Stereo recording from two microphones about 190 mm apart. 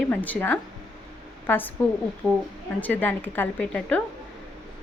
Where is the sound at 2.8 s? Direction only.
10° left (ahead or behind).